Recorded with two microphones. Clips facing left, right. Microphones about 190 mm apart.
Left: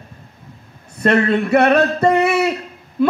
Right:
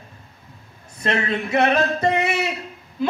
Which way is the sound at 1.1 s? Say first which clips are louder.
Left 7 dB; 60° left (ahead or behind).